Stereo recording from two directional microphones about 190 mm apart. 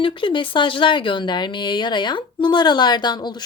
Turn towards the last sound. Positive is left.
turn(degrees=20)  # may be behind; listen again after turning